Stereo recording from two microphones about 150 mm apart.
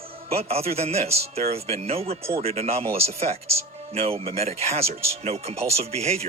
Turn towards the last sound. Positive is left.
turn(degrees=-45)  # may be behind; listen again after turning